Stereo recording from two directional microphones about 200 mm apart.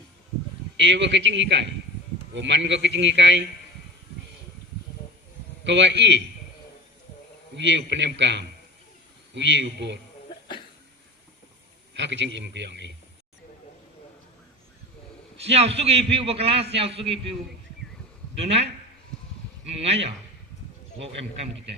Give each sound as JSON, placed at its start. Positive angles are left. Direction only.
{"t": 0.8, "sound": "a man's voice", "side_deg": -60}
{"t": 5.6, "sound": "a man's voice", "side_deg": -60}
{"t": 7.5, "sound": "a man's voice", "side_deg": -60}
{"t": 11.9, "sound": "a man's voice", "side_deg": -60}
{"t": 15.5, "sound": "a man's voice", "side_deg": -30}
{"t": 19.8, "sound": "a man's voice", "side_deg": -30}